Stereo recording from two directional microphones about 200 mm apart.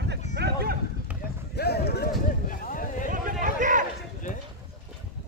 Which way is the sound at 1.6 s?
55° left (ahead or behind).